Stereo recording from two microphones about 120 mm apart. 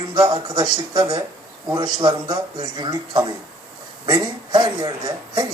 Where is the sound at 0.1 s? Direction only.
35° right (ahead or behind).